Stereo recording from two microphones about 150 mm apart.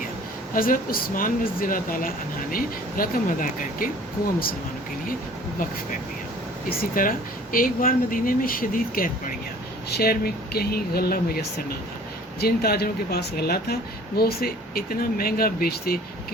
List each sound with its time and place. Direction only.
0.5 s speech: 70° left (ahead or behind)
6.7 s speech: 75° left (ahead or behind)
9.9 s speech: 90° left